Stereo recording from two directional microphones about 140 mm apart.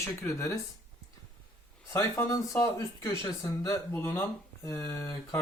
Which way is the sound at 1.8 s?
20° left (ahead or behind).